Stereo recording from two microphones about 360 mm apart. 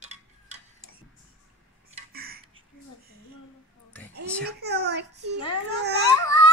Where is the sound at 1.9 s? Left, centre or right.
Right.